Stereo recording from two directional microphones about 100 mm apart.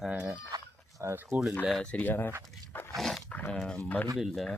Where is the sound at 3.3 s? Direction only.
15° left (ahead or behind).